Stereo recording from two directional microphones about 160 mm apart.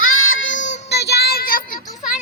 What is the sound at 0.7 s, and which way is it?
Child singing, 90° left.